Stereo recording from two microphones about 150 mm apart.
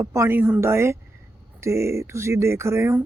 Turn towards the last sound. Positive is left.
turn(degrees=-15)  # may be behind; listen again after turning